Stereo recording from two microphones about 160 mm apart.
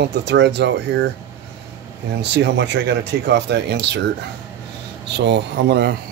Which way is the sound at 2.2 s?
90° right.